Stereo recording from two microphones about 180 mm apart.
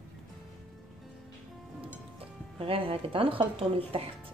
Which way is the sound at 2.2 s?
30° right (ahead or behind).